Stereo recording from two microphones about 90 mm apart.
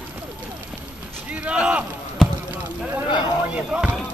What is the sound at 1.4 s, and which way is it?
Speech, 10° right (ahead or behind).